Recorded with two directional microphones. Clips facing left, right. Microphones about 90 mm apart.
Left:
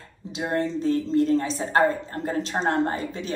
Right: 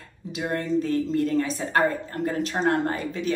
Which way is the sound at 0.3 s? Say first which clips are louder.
Even; 25° left (ahead or behind).